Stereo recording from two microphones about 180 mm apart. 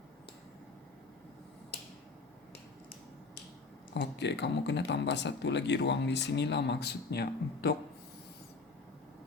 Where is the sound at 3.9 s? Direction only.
75° left (ahead or behind).